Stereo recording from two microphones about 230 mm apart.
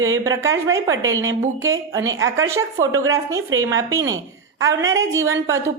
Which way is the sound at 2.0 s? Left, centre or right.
Right.